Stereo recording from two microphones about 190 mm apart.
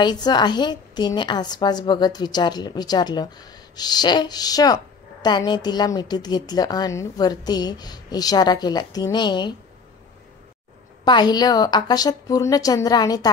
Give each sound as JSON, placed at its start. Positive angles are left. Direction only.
{"t": 0.0, "sound": "a woman's voice", "side_deg": 25}
{"t": 11.1, "sound": "a woman's voice", "side_deg": 20}